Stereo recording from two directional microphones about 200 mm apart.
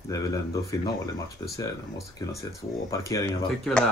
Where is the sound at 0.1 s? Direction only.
15° left (ahead or behind).